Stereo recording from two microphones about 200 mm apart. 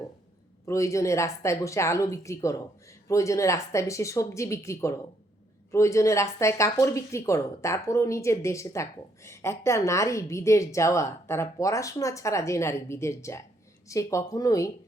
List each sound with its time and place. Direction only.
0.6 s speech: 15° left (ahead or behind)